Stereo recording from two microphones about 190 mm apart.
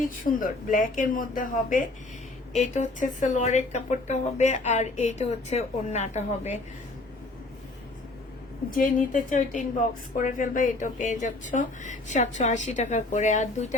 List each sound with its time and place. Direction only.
0.0 s speech: 45° left (ahead or behind)
8.7 s speech: 45° left (ahead or behind)